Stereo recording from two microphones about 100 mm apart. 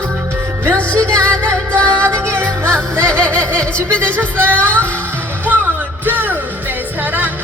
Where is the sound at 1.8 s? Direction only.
10° left (ahead or behind).